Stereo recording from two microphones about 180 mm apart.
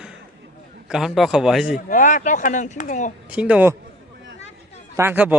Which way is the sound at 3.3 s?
5° right (ahead or behind).